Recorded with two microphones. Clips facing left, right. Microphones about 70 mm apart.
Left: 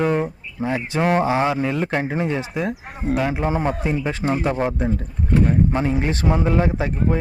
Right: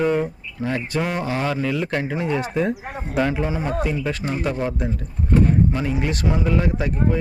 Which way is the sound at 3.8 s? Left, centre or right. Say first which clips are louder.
Left 2 dB; left.